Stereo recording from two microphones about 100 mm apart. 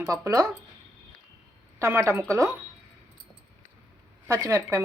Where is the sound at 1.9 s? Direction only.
25° right (ahead or behind).